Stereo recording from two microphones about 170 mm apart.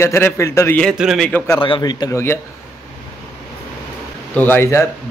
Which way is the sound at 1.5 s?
30° left (ahead or behind).